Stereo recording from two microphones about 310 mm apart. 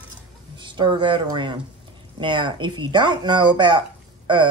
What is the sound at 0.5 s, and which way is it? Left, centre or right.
Speech, centre.